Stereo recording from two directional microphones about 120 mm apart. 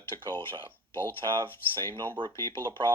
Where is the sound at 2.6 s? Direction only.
40° right (ahead or behind).